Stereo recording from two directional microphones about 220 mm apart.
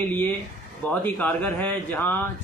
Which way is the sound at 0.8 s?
5° left (ahead or behind).